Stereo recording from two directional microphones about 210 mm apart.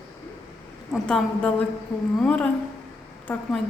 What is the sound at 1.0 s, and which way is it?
A woman's voice, 5° left (ahead or behind).